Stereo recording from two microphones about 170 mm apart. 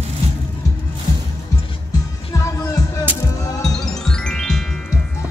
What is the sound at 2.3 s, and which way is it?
Music, 20° left (ahead or behind).